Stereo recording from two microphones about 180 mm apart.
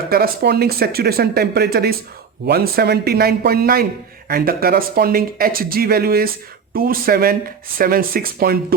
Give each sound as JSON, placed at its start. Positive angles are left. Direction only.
{"t": 0.1, "sound": "speech", "side_deg": -60}